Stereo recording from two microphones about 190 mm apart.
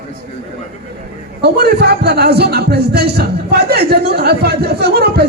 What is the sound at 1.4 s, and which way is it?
A man's voice, 60° right (ahead or behind).